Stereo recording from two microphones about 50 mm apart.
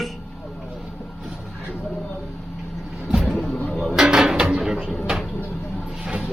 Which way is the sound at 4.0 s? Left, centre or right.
Centre.